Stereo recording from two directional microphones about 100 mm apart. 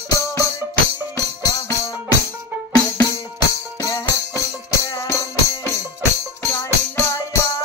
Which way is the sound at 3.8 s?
30° left (ahead or behind).